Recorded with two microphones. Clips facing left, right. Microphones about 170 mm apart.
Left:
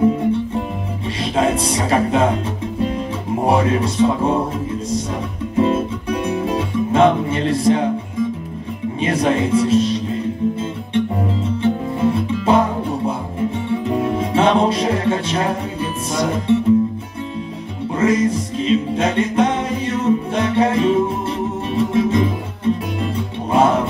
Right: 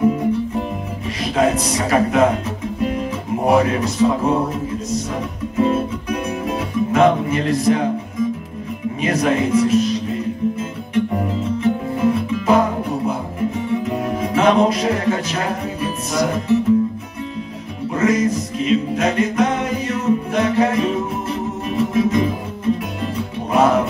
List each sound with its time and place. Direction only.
1.0 s speech: 30° left (ahead or behind)
2.8 s music: 30° left (ahead or behind)
5.6 s music: 30° left (ahead or behind)
17.9 s music: 30° left (ahead or behind)